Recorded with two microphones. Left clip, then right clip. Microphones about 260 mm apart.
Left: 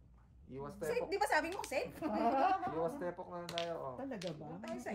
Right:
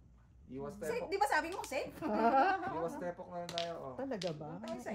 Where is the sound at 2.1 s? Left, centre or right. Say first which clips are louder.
Right 3 dB; right.